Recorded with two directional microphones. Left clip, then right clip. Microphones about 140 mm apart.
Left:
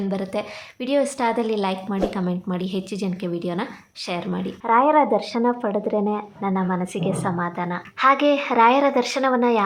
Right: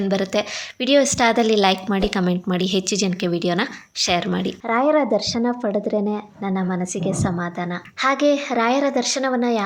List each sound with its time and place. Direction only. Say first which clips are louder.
0.1 s a woman's voice: right 5 dB; 20° right (ahead or behind)